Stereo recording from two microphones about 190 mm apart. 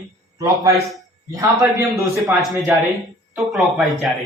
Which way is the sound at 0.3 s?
20° right (ahead or behind).